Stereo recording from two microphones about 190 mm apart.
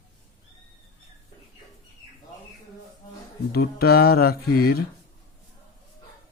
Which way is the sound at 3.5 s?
55° left (ahead or behind).